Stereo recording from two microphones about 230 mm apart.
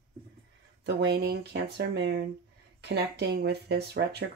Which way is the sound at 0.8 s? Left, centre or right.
Right.